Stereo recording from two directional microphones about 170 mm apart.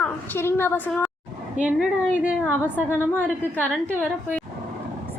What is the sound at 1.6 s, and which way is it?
Speech, 45° right (ahead or behind).